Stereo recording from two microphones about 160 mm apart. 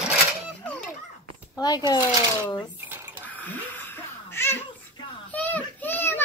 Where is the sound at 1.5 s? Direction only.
25° left (ahead or behind).